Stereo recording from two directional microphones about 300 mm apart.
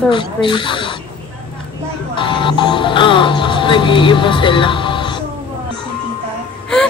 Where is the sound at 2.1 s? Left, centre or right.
Centre.